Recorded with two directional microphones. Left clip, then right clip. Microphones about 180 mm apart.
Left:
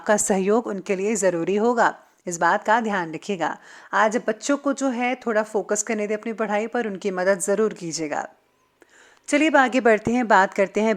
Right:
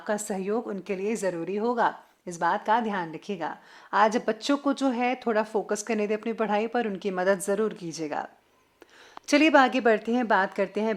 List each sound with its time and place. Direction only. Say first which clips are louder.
0.0 s a woman's voice: left 10 dB; 35° left (ahead or behind)
1.7 s a woman's voice: left 5 dB; 25° left (ahead or behind)
3.9 s speech: left 2 dB; 15° left (ahead or behind)
9.3 s a woman's voice: left 2 dB; 10° left (ahead or behind); by 10.9 s 25° left (ahead or behind)